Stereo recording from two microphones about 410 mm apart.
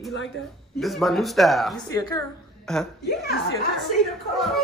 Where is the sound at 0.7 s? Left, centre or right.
Centre.